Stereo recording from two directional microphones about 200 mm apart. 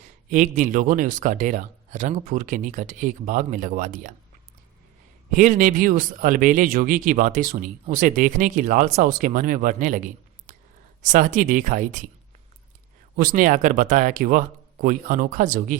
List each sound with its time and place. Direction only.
0.3 s speech: 40° right (ahead or behind)
5.3 s speech: 40° right (ahead or behind)
13.1 s speech: 40° right (ahead or behind)